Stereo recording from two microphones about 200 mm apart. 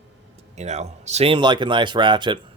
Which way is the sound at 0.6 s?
35° right (ahead or behind).